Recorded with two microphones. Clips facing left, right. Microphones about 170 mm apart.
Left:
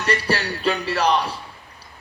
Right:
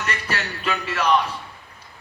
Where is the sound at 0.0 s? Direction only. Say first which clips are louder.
Left 6 dB; 35° left (ahead or behind).